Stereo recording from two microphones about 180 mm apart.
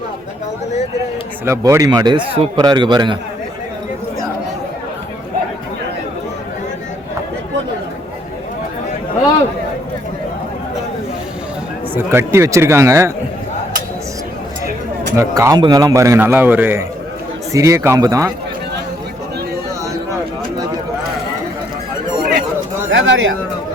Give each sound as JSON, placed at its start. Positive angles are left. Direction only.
{"t": 1.5, "sound": "a man's voice", "side_deg": -15}
{"t": 11.9, "sound": "a man's voice", "side_deg": -15}
{"t": 15.1, "sound": "a man's voice", "side_deg": -15}
{"t": 22.9, "sound": "bird", "side_deg": -90}